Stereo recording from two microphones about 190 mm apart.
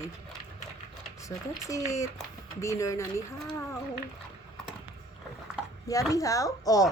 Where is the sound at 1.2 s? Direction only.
15° left (ahead or behind).